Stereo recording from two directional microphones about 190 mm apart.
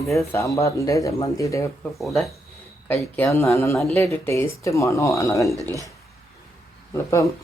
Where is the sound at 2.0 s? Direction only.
Centre (ahead or behind); by 5.5 s 15° left (ahead or behind).